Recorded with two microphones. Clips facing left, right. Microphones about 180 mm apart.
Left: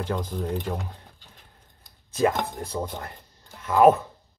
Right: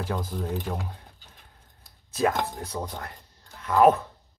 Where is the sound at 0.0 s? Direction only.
5° right (ahead or behind).